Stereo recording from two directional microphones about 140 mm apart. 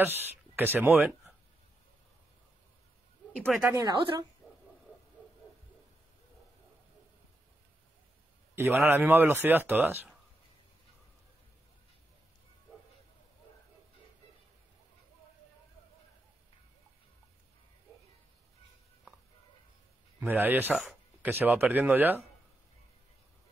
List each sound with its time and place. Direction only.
0.0 s speech: 15° right (ahead or behind)
3.7 s a woman's voice: 30° right (ahead or behind)
8.5 s speech: 15° right (ahead or behind)
20.2 s speech: 15° right (ahead or behind)
20.7 s a sound: 5° right (ahead or behind)
21.3 s speech: 15° right (ahead or behind)